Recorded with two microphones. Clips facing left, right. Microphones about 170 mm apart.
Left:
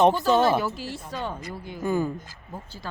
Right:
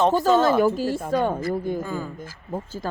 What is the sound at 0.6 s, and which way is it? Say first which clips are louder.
Speech: right 10 dB; 45° right (ahead or behind).